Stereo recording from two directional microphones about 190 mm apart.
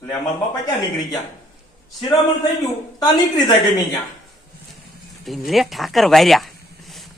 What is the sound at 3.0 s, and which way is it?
Speech, 20° left (ahead or behind).